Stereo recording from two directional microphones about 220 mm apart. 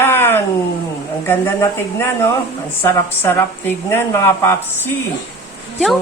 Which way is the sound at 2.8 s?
10° left (ahead or behind).